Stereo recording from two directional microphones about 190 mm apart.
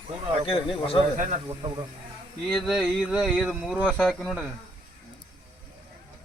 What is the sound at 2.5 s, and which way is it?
Speech, 5° left (ahead or behind).